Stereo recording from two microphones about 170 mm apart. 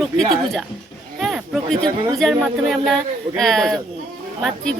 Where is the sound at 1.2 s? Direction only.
Centre (ahead or behind).